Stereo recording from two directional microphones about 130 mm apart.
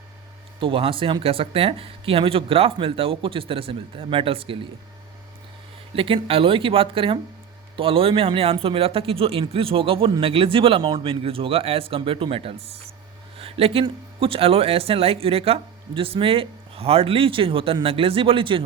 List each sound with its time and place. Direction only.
0.6 s speech: 45° right (ahead or behind)
5.9 s speech: 45° right (ahead or behind)